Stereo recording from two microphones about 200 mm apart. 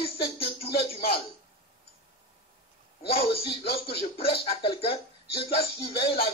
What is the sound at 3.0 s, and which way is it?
Speech, 30° left (ahead or behind).